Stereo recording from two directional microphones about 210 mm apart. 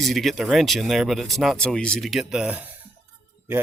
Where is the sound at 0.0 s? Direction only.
Centre (ahead or behind).